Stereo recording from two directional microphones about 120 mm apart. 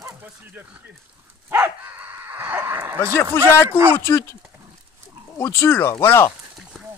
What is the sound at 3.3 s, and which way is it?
Speech, 20° left (ahead or behind).